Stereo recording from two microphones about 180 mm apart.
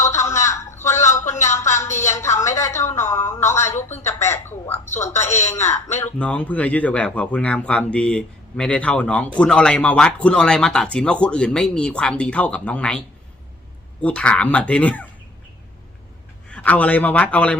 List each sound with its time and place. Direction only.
0.0 s a sound: 15° left (ahead or behind)
4.2 s a woman's voice: 15° left (ahead or behind)
14.0 s speech: 5° left (ahead or behind)
16.5 s speech: 5° left (ahead or behind)